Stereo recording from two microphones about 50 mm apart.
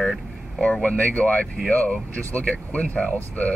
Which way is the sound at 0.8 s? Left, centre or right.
Left.